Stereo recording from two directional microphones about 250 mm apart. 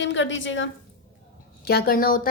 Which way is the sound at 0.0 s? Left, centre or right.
Left.